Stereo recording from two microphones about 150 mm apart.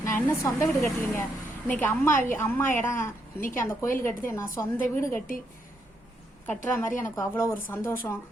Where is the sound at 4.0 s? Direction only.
15° left (ahead or behind).